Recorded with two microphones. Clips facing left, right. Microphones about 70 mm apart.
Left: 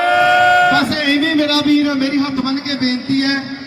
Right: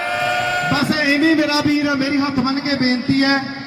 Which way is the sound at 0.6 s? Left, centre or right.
Left.